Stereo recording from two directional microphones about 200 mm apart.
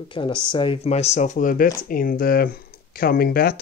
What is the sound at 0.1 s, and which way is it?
Speech, 25° left (ahead or behind).